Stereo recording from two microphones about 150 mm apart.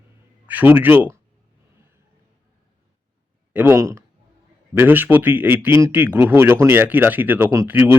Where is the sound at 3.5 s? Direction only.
15° right (ahead or behind).